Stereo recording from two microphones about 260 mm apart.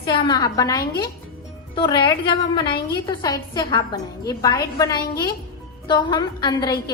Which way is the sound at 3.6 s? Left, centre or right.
Centre.